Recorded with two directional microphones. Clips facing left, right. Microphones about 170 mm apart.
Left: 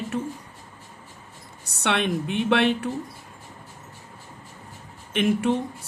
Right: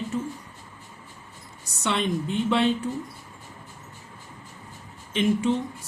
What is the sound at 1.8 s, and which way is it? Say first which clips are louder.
Speech: left 1 dB; 65° left (ahead or behind).